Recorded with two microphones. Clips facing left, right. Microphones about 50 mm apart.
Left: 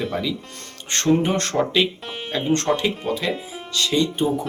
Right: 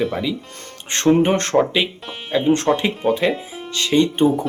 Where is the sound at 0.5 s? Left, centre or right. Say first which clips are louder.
Right 1 dB; right.